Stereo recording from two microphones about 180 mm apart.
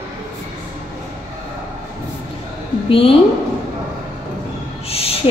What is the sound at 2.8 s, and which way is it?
Speech, 30° left (ahead or behind).